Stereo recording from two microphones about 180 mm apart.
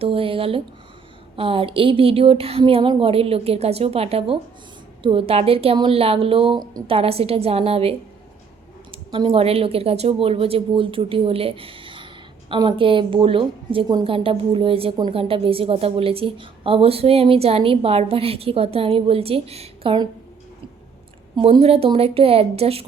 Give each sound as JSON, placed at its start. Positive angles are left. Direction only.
{"t": 0.0, "sound": "a woman's voice", "side_deg": -30}
{"t": 21.3, "sound": "a woman's voice", "side_deg": -30}